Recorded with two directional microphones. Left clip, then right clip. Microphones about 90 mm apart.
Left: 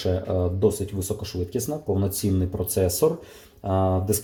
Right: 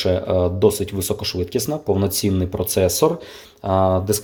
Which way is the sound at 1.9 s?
55° right (ahead or behind).